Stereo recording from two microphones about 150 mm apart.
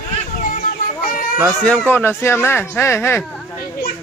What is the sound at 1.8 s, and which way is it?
Speech, 15° left (ahead or behind).